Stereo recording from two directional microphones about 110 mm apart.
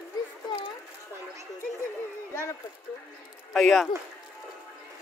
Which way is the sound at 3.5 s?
Centre (ahead or behind).